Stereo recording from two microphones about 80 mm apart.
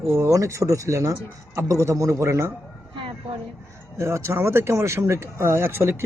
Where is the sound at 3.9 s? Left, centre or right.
Right.